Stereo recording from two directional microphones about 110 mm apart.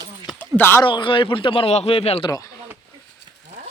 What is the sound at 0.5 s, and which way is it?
Speech, 20° left (ahead or behind).